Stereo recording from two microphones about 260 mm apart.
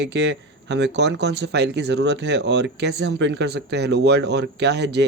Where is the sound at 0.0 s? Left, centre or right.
Right.